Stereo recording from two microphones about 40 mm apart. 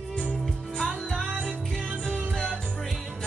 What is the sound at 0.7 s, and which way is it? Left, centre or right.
Music, centre.